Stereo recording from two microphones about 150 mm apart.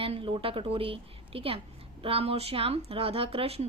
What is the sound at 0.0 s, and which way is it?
A woman's voice, 35° right (ahead or behind).